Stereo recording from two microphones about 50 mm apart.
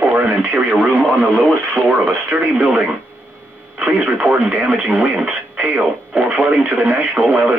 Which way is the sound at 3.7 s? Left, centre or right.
Right.